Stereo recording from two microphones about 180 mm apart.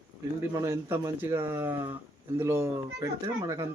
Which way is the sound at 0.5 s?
15° right (ahead or behind).